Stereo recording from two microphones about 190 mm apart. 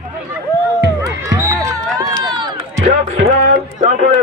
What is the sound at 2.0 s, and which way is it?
Run, 20° right (ahead or behind).